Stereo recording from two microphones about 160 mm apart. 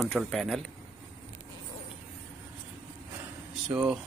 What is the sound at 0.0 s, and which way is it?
Speech, centre (ahead or behind).